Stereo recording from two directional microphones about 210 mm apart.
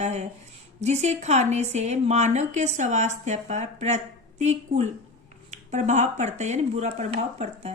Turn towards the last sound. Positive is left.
turn(degrees=-30)  # may be behind; listen again after turning